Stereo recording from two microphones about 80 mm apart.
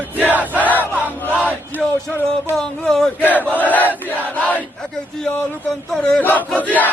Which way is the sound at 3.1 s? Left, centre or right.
Left.